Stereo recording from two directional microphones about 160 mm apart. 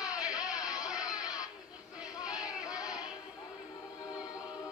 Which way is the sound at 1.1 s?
25° left (ahead or behind).